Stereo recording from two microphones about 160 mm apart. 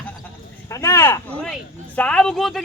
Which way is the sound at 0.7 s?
20° left (ahead or behind).